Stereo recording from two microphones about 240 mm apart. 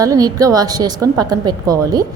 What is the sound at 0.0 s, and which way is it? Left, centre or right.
A woman's voice, centre.